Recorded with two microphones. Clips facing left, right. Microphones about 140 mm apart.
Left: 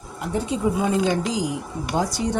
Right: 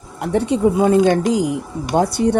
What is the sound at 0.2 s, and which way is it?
Speech, 65° right (ahead or behind).